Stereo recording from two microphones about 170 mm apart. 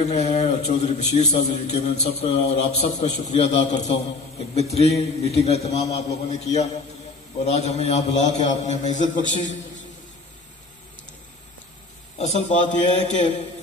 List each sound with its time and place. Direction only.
0.0 s a man's voice: 40° left (ahead or behind)
12.2 s a man's voice: 40° left (ahead or behind)